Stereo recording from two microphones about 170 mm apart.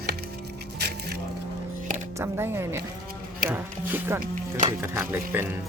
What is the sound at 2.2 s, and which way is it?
A woman's voice, 15° right (ahead or behind).